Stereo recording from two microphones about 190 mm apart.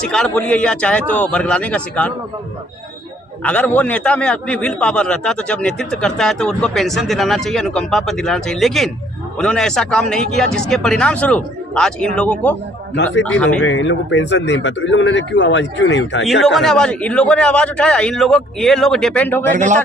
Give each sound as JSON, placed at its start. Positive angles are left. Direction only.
{"t": 0.0, "sound": "a man's voice", "side_deg": 5}
{"t": 3.4, "sound": "a man's voice", "side_deg": 5}
{"t": 13.7, "sound": "speech", "side_deg": 75}
{"t": 16.2, "sound": "a man's voice", "side_deg": 0}
{"t": 19.5, "sound": "speech", "side_deg": -40}